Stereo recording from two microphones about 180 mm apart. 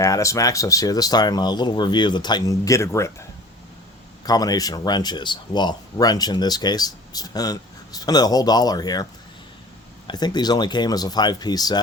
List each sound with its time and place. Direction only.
0.0 s speech: 15° left (ahead or behind)
10.1 s speech: 25° left (ahead or behind)